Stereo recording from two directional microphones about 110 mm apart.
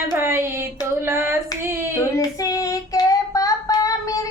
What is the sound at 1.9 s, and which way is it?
Child singing, 35° left (ahead or behind).